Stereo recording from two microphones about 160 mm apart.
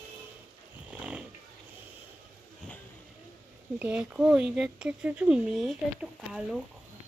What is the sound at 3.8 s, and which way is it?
Speech, 10° right (ahead or behind).